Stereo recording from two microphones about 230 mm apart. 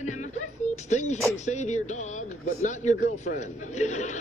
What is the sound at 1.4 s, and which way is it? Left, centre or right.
Speech, left.